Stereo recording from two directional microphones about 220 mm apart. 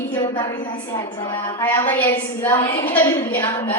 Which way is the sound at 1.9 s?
10° left (ahead or behind).